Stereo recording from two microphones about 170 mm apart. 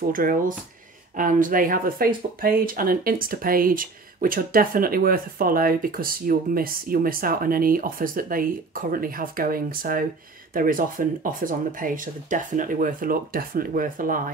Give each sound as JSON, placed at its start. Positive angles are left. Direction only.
{"t": 0.1, "sound": "speech", "side_deg": -55}